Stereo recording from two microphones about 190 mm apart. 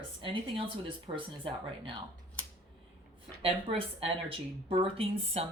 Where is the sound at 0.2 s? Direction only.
30° right (ahead or behind).